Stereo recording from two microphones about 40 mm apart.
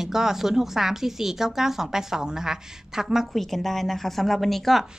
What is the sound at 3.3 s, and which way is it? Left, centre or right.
Speech, centre.